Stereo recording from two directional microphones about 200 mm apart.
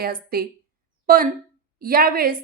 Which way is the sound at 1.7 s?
45° right (ahead or behind).